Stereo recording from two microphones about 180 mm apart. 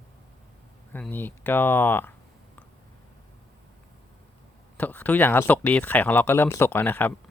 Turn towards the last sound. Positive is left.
turn(degrees=10)  # may be behind; listen again after turning